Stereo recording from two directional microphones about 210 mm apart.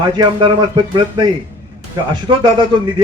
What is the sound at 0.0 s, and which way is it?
A man's voice, 20° right (ahead or behind).